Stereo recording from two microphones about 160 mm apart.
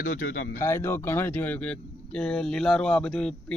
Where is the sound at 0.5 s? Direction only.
15° left (ahead or behind).